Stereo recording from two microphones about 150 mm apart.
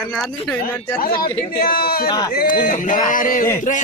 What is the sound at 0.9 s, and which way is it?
Speech, 70° left (ahead or behind).